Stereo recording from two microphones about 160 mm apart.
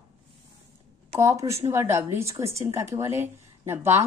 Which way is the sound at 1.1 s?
20° right (ahead or behind).